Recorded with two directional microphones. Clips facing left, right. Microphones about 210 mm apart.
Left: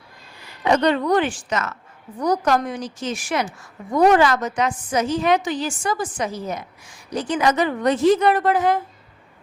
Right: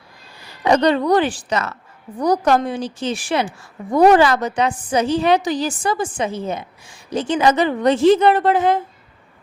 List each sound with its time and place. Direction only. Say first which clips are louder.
0.6 s a woman's voice: right 3 dB; 35° right (ahead or behind)